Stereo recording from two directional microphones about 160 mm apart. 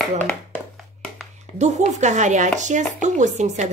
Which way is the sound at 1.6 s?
45° right (ahead or behind).